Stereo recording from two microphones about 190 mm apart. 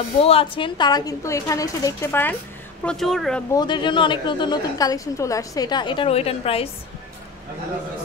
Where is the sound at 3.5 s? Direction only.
25° left (ahead or behind).